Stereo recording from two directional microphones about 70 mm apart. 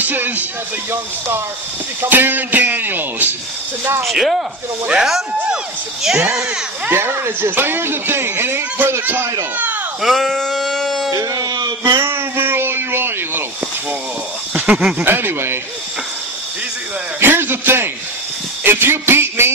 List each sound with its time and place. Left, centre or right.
0.0 s speech: right
2.0 s speech: right
4.0 s speech: centre
6.9 s speech: right
10.0 s sheep: centre
11.1 s speech: right
11.5 s a sound: right
12.0 s a sound: right
14.5 s a sound: centre
15.0 s speech: right
17.2 s speech: right